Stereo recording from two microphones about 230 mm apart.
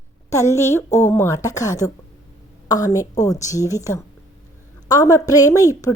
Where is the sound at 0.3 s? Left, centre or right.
Centre.